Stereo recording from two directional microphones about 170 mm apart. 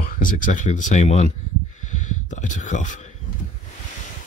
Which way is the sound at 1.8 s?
45° left (ahead or behind).